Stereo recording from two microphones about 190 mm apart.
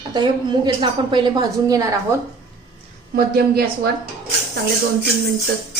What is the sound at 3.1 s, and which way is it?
Speech, 55° right (ahead or behind).